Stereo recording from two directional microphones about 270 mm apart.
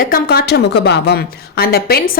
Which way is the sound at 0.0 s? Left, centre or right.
Left.